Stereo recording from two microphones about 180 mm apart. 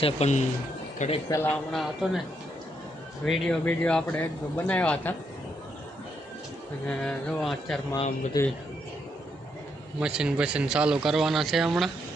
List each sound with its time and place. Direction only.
0.0 s speech: 40° left (ahead or behind)
1.3 s a man's voice: 15° left (ahead or behind)
1.7 s speech: centre (ahead or behind)
3.2 s a man's voice: 5° left (ahead or behind)
6.8 s speech: 5° left (ahead or behind)
8.4 s speech: 20° left (ahead or behind)
10.0 s speech: 5° right (ahead or behind)